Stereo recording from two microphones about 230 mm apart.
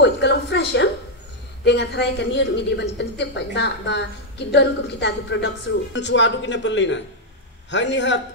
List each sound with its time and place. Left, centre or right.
0.0 s a woman's voice: left